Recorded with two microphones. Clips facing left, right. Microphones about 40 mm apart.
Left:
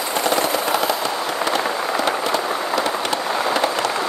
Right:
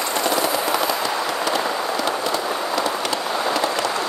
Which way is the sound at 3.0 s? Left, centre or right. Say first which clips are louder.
Left 2 dB; left.